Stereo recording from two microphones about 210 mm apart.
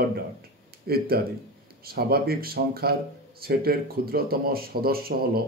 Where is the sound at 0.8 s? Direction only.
45° right (ahead or behind).